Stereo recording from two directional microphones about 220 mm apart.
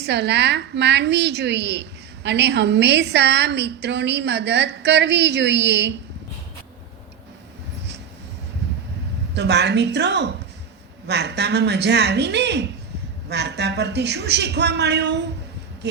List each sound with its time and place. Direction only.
0.0 s a woman's voice: 50° right (ahead or behind)
9.3 s a woman's voice: 50° right (ahead or behind)